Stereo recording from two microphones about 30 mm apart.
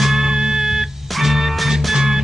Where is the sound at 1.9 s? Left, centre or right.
Centre.